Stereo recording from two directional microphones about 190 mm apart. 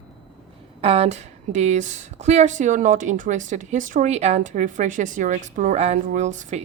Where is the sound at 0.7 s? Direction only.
30° right (ahead or behind).